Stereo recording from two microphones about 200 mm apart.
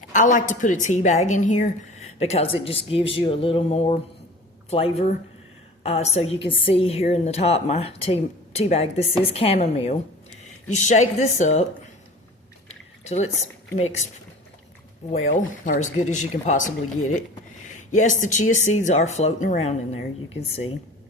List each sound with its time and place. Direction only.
0.1 s a woman's voice: 40° left (ahead or behind)
13.1 s speech: 35° left (ahead or behind)
15.3 s speech: 40° left (ahead or behind)